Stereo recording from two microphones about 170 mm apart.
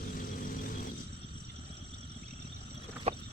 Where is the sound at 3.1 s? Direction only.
40° right (ahead or behind).